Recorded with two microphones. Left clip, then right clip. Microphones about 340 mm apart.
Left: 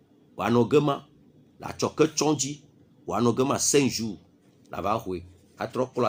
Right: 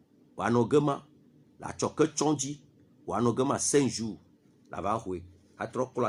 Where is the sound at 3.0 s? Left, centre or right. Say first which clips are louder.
Left 4 dB; right.